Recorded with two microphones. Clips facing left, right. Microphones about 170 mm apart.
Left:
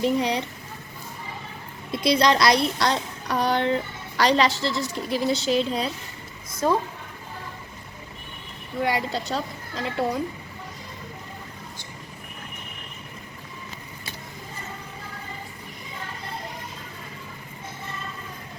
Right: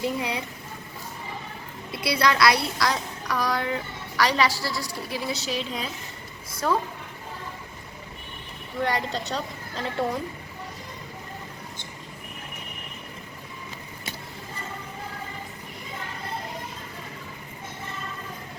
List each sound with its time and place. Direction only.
0.0 s a woman's voice: 30° left (ahead or behind)
1.9 s a woman's voice: 30° left (ahead or behind)
4.6 s a woman's voice: 10° right (ahead or behind)
5.5 s a woman's voice: 35° left (ahead or behind)
6.6 s a woman's voice: 20° left (ahead or behind)
8.8 s speech: 5° left (ahead or behind)